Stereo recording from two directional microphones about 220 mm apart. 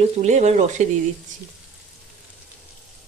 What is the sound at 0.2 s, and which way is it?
Speech, 30° right (ahead or behind).